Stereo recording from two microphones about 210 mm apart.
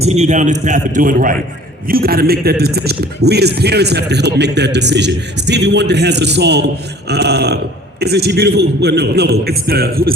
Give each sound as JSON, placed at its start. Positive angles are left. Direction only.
{"t": 0.0, "sound": "a man's voice", "side_deg": -30}